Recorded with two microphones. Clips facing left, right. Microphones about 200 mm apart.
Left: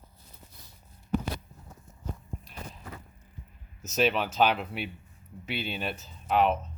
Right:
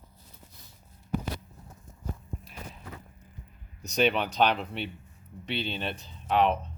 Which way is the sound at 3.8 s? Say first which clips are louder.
Right 1 dB; 5° left (ahead or behind).